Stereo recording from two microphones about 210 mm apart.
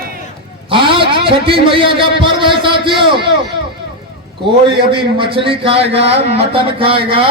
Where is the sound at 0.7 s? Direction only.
25° right (ahead or behind).